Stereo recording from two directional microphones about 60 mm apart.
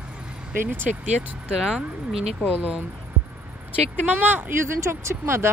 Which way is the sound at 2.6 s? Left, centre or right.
Right.